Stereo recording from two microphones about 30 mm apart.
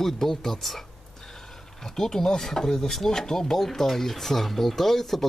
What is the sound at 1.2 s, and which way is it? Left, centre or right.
Speech, centre.